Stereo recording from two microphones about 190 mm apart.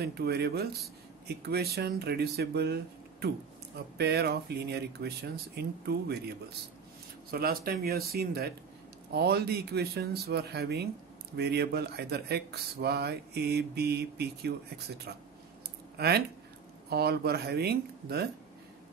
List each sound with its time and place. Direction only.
0.0 s speech: 60° right (ahead or behind)